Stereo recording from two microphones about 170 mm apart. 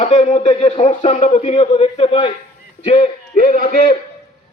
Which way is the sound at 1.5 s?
30° left (ahead or behind).